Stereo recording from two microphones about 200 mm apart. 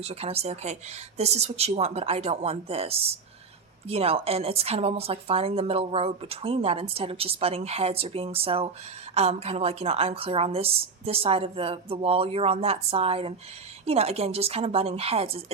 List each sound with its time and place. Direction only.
0.0 s a woman's voice: 30° right (ahead or behind)